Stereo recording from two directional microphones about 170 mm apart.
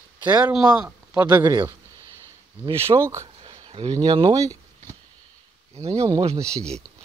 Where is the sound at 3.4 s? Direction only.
35° right (ahead or behind).